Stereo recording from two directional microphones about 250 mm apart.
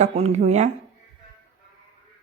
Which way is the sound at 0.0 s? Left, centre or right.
Right.